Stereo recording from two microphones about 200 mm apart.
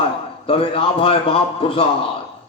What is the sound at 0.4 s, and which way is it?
A man's voice, 30° left (ahead or behind).